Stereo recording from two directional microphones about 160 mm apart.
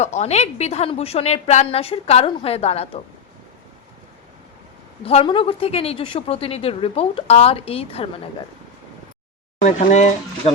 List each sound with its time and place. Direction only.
0.0 s a woman's voice: 45° left (ahead or behind)
5.0 s a woman's voice: 35° left (ahead or behind)
9.6 s speech: 50° left (ahead or behind)